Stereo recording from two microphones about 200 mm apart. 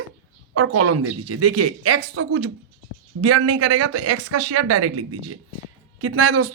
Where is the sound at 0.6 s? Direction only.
90° right.